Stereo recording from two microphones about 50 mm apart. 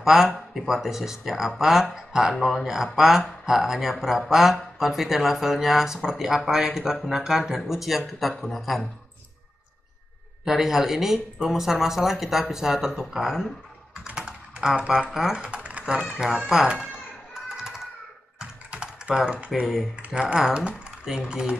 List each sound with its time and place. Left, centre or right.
0.0 s speech: centre
10.4 s speech: centre
13.9 s typing: centre
15.1 s speech: centre
15.4 s typing: right
15.9 s speech: centre
17.3 s typing: centre
18.7 s typing: right
19.6 s speech: centre
20.3 s speech: centre